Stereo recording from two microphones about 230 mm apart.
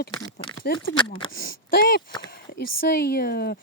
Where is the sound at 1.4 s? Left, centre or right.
Left.